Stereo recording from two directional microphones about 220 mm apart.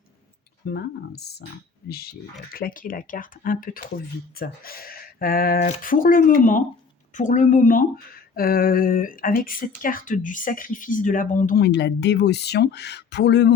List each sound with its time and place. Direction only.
0.7 s speech: 45° left (ahead or behind)